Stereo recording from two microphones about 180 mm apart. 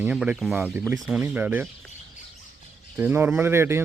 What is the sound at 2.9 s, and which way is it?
Speech, 10° right (ahead or behind).